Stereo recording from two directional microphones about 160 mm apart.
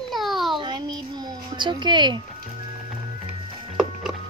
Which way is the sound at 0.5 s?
25° right (ahead or behind).